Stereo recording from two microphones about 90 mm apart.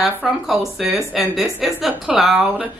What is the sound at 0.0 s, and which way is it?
A woman's voice, 5° right (ahead or behind).